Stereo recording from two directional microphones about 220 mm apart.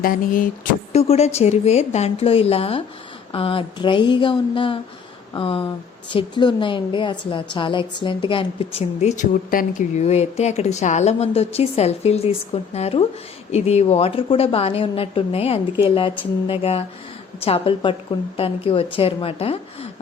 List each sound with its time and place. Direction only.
0.0 s a woman's voice: 40° left (ahead or behind)